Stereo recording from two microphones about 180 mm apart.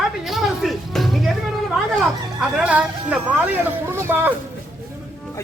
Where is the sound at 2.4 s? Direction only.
5° right (ahead or behind).